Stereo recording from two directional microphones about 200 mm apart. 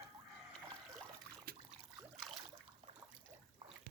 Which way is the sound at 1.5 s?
50° right (ahead or behind).